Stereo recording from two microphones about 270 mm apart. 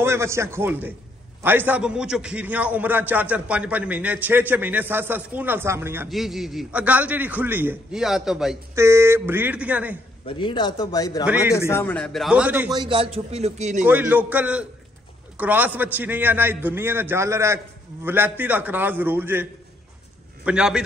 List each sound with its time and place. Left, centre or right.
0.0 s a man's voice: centre
10.2 s a man's voice: centre
11.2 s a man's voice: centre
11.5 s a man's voice: centre
12.8 s a man's voice: centre
13.8 s a man's voice: centre
20.4 s a man's voice: centre